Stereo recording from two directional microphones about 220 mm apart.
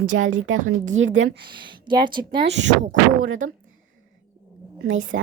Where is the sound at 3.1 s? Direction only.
70° right (ahead or behind).